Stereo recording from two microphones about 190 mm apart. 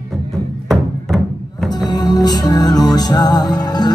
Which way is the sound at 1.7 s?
20° left (ahead or behind).